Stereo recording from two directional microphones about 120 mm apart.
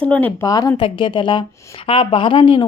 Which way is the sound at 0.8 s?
45° left (ahead or behind).